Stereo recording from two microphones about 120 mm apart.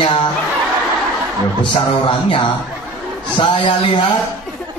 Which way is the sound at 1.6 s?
45° left (ahead or behind).